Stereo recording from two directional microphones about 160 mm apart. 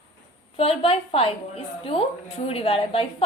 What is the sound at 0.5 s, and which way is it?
Speech, 35° left (ahead or behind).